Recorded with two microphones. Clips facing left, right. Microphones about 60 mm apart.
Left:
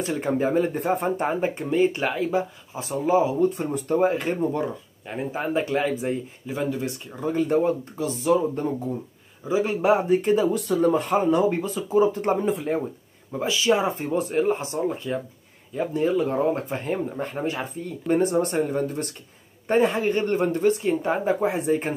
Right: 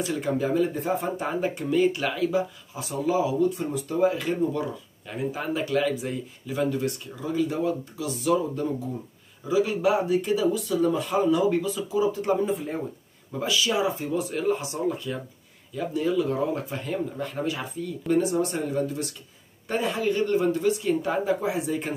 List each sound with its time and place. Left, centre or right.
0.0 s speech: left
1.3 s speech: left
7.2 s speech: left
12.4 s speech: left
13.4 s speech: left